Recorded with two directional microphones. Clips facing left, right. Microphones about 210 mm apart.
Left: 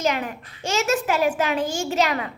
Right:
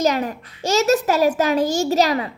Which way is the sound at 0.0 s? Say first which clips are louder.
Right 5 dB; 40° right (ahead or behind).